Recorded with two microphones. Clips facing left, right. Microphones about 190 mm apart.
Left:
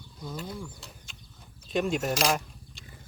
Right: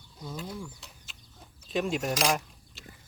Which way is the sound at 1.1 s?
Centre (ahead or behind).